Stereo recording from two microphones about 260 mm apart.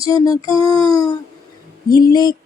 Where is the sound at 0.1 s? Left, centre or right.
Centre.